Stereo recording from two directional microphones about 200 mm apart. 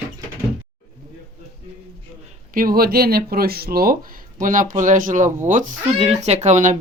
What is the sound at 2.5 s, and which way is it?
Speech, 45° right (ahead or behind).